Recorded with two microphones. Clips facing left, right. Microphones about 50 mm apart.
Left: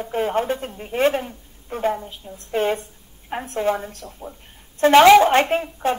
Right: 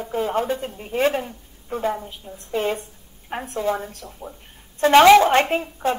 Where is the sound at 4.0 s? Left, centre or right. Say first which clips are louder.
Left 1 dB; centre.